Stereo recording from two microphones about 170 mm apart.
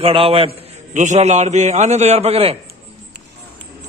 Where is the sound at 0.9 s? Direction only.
45° right (ahead or behind).